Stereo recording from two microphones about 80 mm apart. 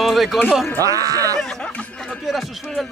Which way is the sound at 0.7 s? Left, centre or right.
Right.